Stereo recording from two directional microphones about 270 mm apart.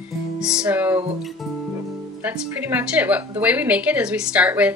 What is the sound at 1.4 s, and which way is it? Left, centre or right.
Music, centre.